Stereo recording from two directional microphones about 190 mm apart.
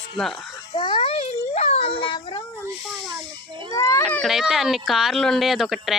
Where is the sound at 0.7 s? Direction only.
25° left (ahead or behind).